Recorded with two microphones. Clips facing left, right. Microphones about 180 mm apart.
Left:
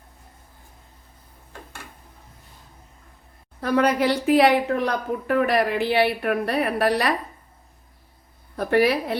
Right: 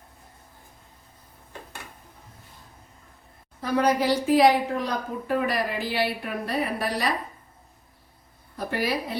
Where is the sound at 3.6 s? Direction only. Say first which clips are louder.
Left 3 dB; 60° left (ahead or behind).